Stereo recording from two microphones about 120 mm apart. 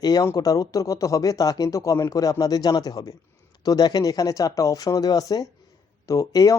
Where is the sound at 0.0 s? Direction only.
30° left (ahead or behind).